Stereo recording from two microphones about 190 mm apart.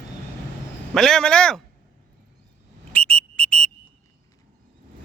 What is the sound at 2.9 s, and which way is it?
Whistle, 10° left (ahead or behind).